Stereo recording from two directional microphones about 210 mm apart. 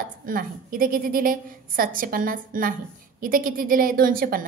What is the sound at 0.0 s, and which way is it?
A woman's voice, 40° right (ahead or behind).